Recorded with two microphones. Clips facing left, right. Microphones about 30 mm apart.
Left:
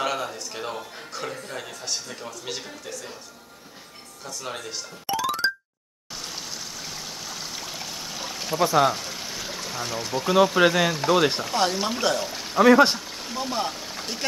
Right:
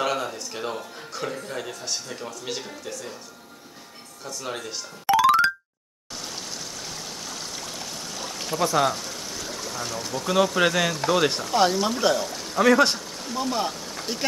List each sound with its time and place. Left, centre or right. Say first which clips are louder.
0.0 s a sound: right 1 dB; centre
1.1 s a man's voice: right 2 dB; centre
4.2 s a man's voice: right 1 dB; centre
5.0 s music: right 7 dB; right
6.1 s stream: even; centre
11.5 s a man's voice: right 3 dB; centre
12.3 s speech: left 3 dB; centre